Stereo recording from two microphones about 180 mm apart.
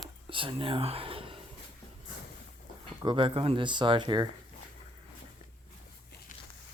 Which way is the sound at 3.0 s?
25° right (ahead or behind).